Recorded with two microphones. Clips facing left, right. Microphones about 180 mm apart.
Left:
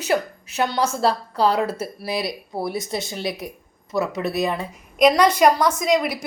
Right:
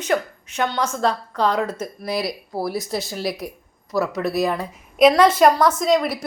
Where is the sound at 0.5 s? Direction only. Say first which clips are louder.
Left 1 dB; 35° left (ahead or behind).